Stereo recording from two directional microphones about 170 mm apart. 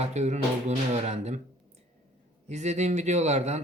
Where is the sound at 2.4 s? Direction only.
40° right (ahead or behind).